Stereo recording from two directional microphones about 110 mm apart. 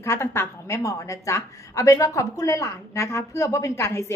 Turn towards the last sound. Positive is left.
turn(degrees=25)  # may be behind; listen again after turning